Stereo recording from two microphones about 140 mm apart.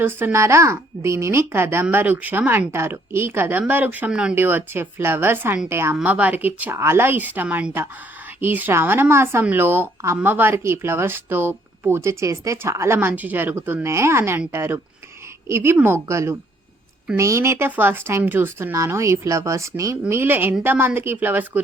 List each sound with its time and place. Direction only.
0.0 s a woman's voice: 15° right (ahead or behind)